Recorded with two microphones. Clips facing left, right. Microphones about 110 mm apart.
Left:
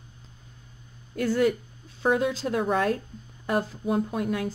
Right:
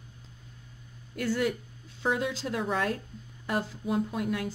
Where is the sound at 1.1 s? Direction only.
45° left (ahead or behind).